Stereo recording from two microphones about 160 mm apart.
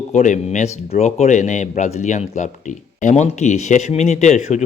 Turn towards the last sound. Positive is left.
turn(degrees=45)  # may be behind; listen again after turning